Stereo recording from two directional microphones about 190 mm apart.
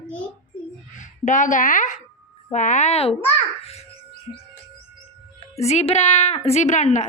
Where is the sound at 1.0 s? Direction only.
40° left (ahead or behind).